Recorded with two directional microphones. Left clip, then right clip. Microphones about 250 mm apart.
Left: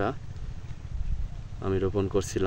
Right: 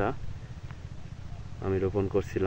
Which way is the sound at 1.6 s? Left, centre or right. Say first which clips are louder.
Left 1 dB; centre.